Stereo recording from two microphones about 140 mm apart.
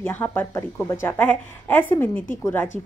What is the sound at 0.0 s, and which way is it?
A woman's voice, 15° left (ahead or behind).